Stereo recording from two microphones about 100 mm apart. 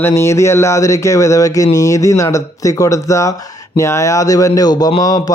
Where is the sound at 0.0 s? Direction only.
25° left (ahead or behind).